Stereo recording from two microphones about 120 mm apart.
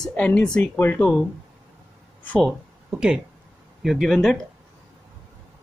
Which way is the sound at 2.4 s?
5° right (ahead or behind).